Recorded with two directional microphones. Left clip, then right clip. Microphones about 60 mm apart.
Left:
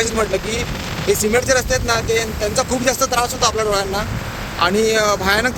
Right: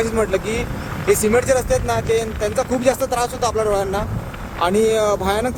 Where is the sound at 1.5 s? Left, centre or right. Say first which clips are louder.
Left 1 dB; right.